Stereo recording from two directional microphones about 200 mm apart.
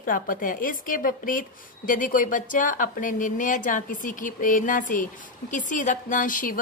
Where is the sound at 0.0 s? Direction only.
45° left (ahead or behind).